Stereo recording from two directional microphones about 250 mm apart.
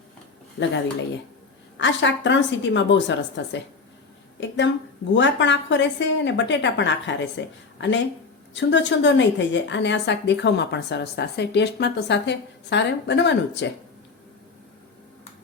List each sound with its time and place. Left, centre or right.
0.6 s a woman's voice: left
1.8 s a woman's voice: left